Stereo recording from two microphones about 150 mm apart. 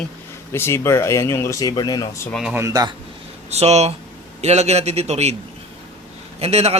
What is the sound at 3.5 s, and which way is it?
Speech, 45° right (ahead or behind).